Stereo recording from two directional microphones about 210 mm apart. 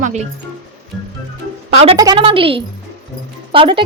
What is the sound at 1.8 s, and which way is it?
A woman's voice, 20° right (ahead or behind).